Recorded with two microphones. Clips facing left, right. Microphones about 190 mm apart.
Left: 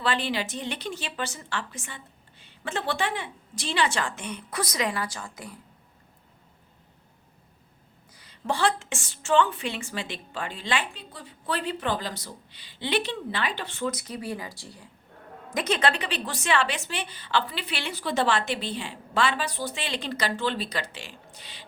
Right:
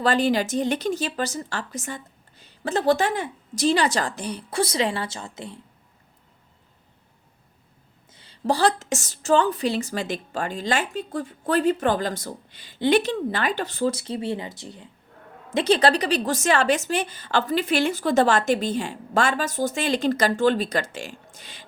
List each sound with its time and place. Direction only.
0.0 s a woman's voice: 45° right (ahead or behind); by 5.5 s 25° right (ahead or behind)
8.1 s a woman's voice: 30° right (ahead or behind); by 21.6 s 45° right (ahead or behind)